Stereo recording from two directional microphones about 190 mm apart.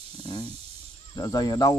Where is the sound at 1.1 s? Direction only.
20° left (ahead or behind).